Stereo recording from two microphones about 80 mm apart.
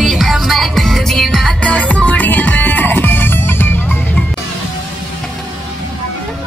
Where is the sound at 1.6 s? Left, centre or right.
Centre.